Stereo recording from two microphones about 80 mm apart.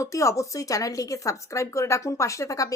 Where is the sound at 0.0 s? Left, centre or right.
Left.